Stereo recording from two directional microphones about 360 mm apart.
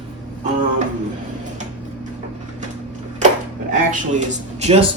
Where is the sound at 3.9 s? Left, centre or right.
Centre.